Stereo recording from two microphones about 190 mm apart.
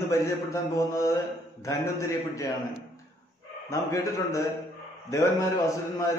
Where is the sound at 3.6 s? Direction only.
15° left (ahead or behind).